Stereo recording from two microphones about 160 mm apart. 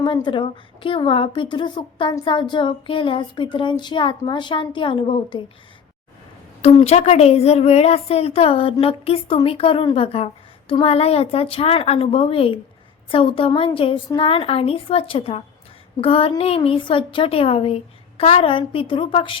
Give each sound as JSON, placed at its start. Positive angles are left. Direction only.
{"t": 0.0, "sound": "speech", "side_deg": 30}
{"t": 6.6, "sound": "speech", "side_deg": 35}